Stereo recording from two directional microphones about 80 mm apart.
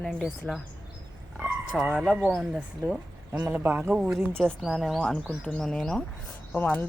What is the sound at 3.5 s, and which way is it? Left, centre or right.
Speech, right.